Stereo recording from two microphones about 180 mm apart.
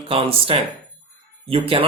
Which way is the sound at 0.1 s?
30° right (ahead or behind).